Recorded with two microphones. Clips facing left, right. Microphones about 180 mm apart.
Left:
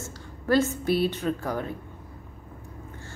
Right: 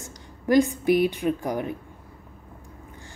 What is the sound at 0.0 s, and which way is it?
A woman's voice, 15° right (ahead or behind).